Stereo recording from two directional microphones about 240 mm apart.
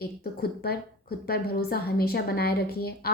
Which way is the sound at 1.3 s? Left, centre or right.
Left.